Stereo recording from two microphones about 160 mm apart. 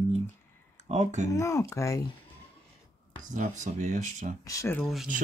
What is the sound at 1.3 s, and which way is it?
Speech, 20° left (ahead or behind).